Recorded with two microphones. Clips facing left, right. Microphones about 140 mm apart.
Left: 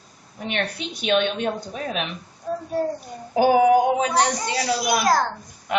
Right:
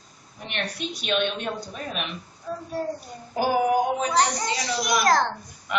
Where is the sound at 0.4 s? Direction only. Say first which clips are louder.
Left 4 dB; 55° left (ahead or behind).